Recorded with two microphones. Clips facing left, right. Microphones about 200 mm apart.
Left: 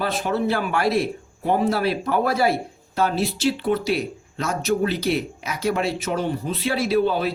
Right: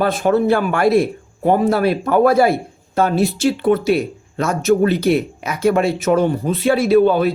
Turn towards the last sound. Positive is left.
turn(degrees=-55)  # may be behind; listen again after turning